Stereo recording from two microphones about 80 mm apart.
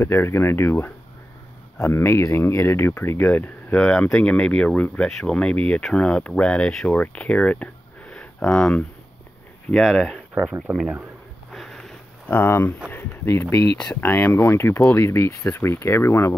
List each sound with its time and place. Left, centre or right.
0.0 s speech: left; by 8.8 s centre
9.8 s speech: centre
10.7 s speech: right
11.5 s a sound: centre
12.3 s speech: left
14.0 s speech: left
14.8 s speech: left